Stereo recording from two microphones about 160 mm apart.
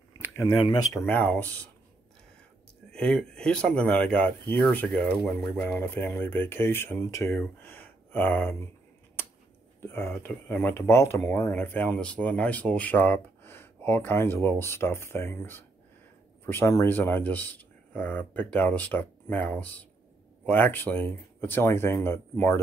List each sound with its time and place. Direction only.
0.5 s speech: 25° left (ahead or behind)
1.0 s speech: 10° left (ahead or behind)
2.9 s speech: 5° left (ahead or behind)
5.8 s speech: 15° left (ahead or behind)
9.8 s speech: 15° left (ahead or behind)